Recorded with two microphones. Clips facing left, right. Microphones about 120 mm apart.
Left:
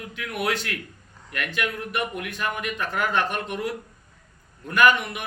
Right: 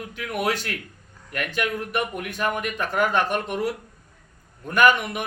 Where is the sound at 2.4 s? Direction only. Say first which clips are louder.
Right 4 dB; 45° right (ahead or behind).